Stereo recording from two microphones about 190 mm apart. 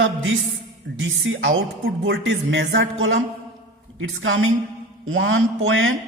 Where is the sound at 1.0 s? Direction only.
90° right.